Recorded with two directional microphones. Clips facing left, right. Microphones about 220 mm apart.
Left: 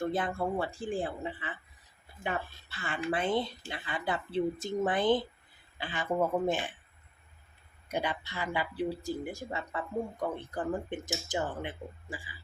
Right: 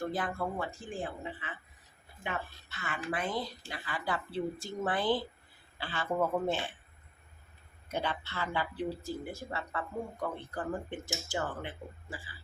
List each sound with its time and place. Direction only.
0.0 s speech: 25° left (ahead or behind)
7.9 s speech: 15° left (ahead or behind)